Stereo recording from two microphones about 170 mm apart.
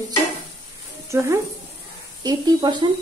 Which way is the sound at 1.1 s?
15° right (ahead or behind).